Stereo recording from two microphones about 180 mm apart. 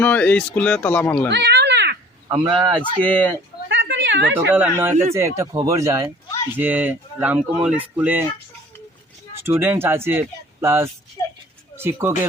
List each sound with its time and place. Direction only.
0.0 s speech: 10° left (ahead or behind)
1.3 s cat: 70° right (ahead or behind)
2.4 s a man's voice: 25° right (ahead or behind)
3.0 s speech: 10° left (ahead or behind)
3.7 s a sound: 90° right
4.4 s speech: 10° right (ahead or behind)
9.4 s speech: 10° right (ahead or behind)
11.2 s a sound: 20° left (ahead or behind)
11.8 s speech: 15° right (ahead or behind)